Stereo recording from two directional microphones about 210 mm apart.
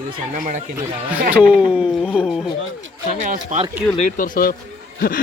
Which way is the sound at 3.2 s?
35° right (ahead or behind).